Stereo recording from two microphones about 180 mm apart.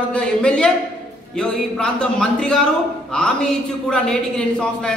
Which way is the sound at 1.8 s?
5° left (ahead or behind).